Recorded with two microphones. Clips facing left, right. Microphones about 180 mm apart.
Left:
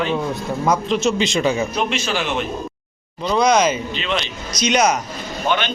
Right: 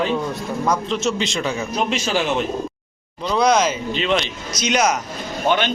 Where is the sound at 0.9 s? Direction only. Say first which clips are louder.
Left 3 dB; 15° left (ahead or behind).